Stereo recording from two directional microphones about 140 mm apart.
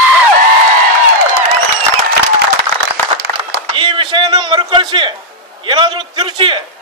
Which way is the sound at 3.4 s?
35° right (ahead or behind).